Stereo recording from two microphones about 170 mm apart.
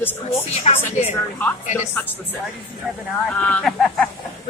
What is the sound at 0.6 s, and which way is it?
Speech, 40° left (ahead or behind).